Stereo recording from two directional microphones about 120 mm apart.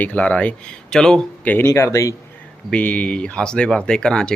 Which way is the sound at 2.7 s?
10° left (ahead or behind).